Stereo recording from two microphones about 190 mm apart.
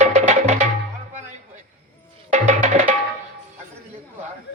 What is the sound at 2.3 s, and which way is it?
Music, 40° right (ahead or behind).